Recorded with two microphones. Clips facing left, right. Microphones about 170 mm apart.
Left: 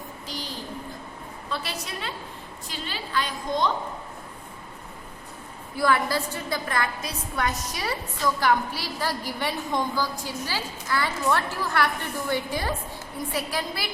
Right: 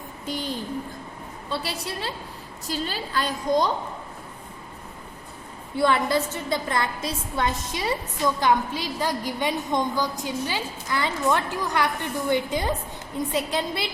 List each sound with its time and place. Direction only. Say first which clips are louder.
0.3 s a sound: right 8 dB; 50° right (ahead or behind)
1.5 s a woman's voice: right 3 dB; 30° right (ahead or behind)
5.7 s a woman's voice: right 2 dB; 25° right (ahead or behind)